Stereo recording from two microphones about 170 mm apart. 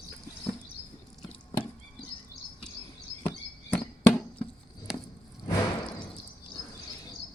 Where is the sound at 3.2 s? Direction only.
10° left (ahead or behind).